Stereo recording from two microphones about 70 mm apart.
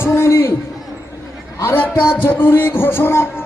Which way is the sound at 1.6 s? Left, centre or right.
Left.